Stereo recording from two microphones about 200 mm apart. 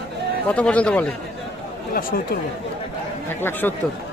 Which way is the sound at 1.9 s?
45° left (ahead or behind).